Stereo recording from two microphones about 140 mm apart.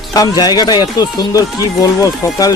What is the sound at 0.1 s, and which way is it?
Speech, 25° left (ahead or behind).